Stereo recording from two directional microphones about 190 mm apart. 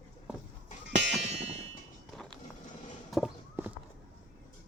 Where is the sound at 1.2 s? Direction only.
35° right (ahead or behind).